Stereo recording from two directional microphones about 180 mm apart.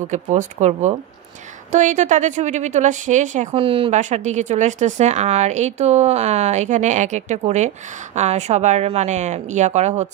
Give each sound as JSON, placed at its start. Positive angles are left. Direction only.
{"t": 0.1, "sound": "a woman's voice", "side_deg": -40}
{"t": 3.5, "sound": "speech", "side_deg": -30}
{"t": 4.0, "sound": "speech", "side_deg": -40}